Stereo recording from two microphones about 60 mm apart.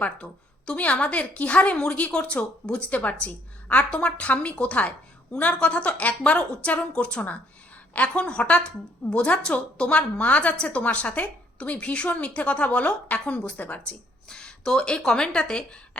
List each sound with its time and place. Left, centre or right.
0.0 s a woman's voice: centre
14.3 s speech: centre